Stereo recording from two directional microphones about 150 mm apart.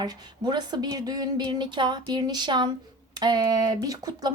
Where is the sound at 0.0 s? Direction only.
30° right (ahead or behind).